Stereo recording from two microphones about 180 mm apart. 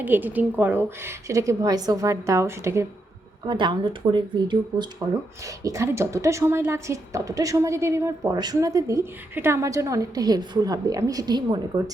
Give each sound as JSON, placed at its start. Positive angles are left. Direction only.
{"t": 0.0, "sound": "a woman's voice", "side_deg": -10}
{"t": 3.4, "sound": "a woman's voice", "side_deg": -25}